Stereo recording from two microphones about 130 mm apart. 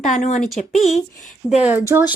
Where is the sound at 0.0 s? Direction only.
65° left (ahead or behind).